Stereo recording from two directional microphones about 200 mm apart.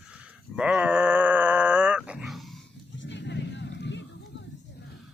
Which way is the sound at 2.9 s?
65° left (ahead or behind).